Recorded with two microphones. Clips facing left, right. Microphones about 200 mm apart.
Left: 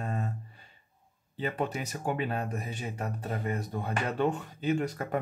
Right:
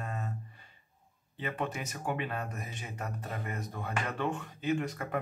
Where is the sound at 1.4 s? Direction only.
35° left (ahead or behind).